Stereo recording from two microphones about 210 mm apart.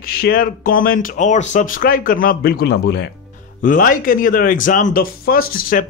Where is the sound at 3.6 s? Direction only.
40° left (ahead or behind).